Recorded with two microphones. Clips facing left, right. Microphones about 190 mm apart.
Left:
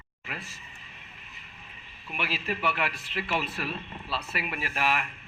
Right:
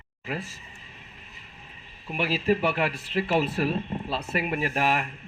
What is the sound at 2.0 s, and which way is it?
Speech, 40° right (ahead or behind).